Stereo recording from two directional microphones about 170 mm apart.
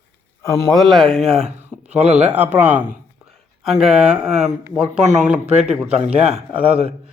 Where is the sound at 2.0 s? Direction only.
40° right (ahead or behind).